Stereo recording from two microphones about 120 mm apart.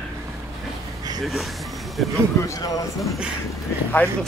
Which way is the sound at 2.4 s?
30° left (ahead or behind).